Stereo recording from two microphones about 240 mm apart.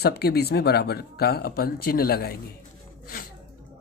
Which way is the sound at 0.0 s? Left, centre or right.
Left.